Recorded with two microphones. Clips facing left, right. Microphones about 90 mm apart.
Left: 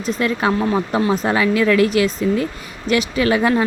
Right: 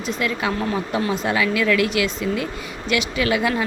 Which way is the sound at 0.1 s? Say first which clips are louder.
Left 5 dB; 35° left (ahead or behind).